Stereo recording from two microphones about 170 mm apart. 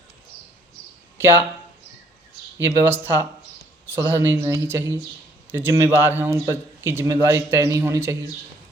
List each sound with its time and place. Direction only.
1.2 s speech: 15° right (ahead or behind)
2.6 s a man's voice: 15° right (ahead or behind)